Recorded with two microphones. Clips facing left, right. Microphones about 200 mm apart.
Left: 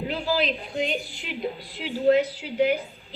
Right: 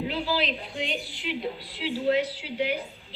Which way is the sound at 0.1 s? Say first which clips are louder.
Left 3 dB; 45° left (ahead or behind).